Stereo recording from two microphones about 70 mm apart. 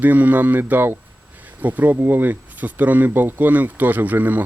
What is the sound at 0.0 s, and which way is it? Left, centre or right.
Speech, right.